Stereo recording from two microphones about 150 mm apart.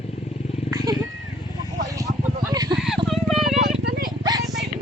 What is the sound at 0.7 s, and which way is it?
Wild animals, 25° right (ahead or behind).